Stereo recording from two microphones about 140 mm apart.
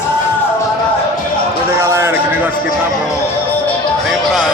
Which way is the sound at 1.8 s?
20° right (ahead or behind).